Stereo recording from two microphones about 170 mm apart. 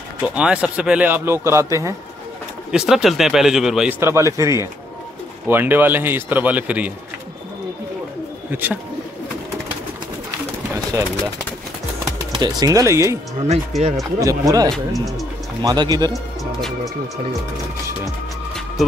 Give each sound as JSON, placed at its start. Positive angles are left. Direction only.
{"t": 0.4, "sound": "speech", "side_deg": -5}
{"t": 2.7, "sound": "speech", "side_deg": -5}
{"t": 4.0, "sound": "speech", "side_deg": -15}
{"t": 8.5, "sound": "speech", "side_deg": -10}
{"t": 12.4, "sound": "speech", "side_deg": -25}
{"t": 13.5, "sound": "speech", "side_deg": -40}
{"t": 14.2, "sound": "speech", "side_deg": -20}